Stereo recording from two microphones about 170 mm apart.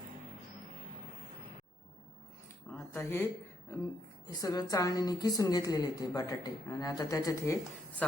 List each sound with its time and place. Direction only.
2.7 s speech: 10° left (ahead or behind)
4.3 s a woman's voice: 20° left (ahead or behind)